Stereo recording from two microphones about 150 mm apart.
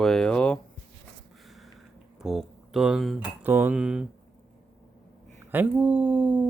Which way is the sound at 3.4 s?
15° right (ahead or behind).